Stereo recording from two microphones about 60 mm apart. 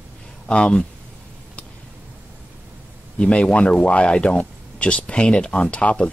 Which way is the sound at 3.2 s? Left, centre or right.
Centre.